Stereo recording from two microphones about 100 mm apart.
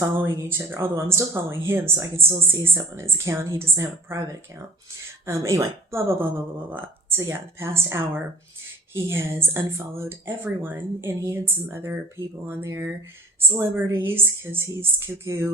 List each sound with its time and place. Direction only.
0.0 s speech: 30° right (ahead or behind)
5.2 s speech: 30° right (ahead or behind)